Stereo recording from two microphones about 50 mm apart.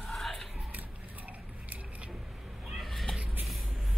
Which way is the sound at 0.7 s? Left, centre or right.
Right.